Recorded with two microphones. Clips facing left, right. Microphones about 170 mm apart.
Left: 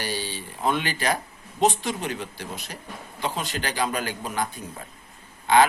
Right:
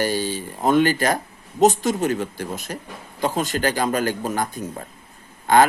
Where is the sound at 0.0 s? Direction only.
45° right (ahead or behind).